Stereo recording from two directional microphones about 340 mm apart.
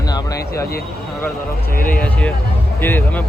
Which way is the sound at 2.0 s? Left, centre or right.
Centre.